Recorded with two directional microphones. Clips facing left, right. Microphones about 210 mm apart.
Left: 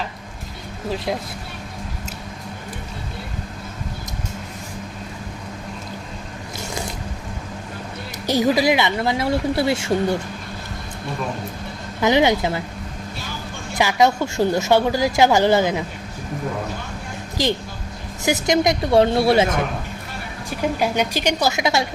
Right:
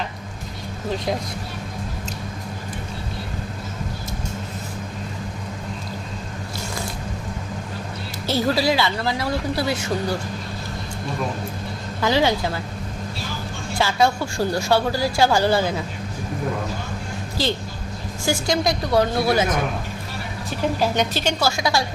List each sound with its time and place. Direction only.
8.3 s speech: 15° left (ahead or behind)
11.9 s speech: 20° left (ahead or behind)
13.7 s a woman's voice: 20° left (ahead or behind)
17.4 s a woman's voice: 15° left (ahead or behind)
20.7 s a woman's voice: 10° left (ahead or behind)